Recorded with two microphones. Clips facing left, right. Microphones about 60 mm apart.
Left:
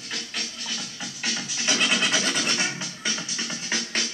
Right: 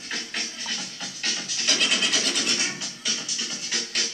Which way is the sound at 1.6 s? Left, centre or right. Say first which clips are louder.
Left 2 dB; left.